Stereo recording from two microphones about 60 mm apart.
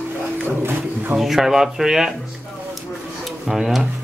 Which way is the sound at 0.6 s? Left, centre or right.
Right.